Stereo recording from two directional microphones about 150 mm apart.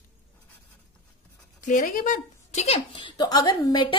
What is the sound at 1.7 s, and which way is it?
Speech, 65° left (ahead or behind).